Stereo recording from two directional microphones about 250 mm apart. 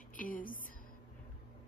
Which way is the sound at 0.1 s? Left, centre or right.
Left.